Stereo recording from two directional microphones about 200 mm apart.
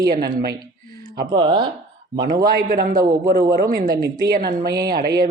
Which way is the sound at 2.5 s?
45° right (ahead or behind).